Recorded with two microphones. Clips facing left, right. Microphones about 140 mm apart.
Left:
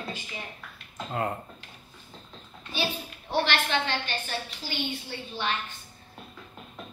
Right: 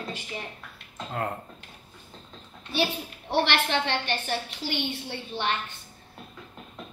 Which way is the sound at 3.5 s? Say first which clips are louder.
Right 2 dB; 60° right (ahead or behind).